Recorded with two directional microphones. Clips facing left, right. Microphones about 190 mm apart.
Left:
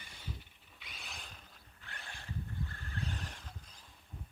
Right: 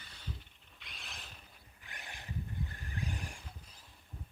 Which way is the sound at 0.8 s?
Centre (ahead or behind).